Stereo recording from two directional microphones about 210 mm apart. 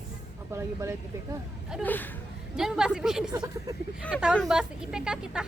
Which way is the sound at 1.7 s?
10° left (ahead or behind).